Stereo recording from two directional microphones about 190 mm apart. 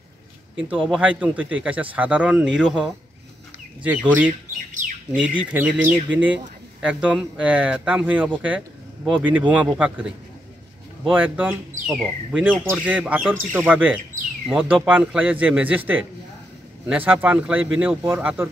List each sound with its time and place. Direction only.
0.6 s a man's voice: 5° right (ahead or behind)
4.8 s bird: 40° right (ahead or behind)
5.5 s a man's voice: 10° right (ahead or behind)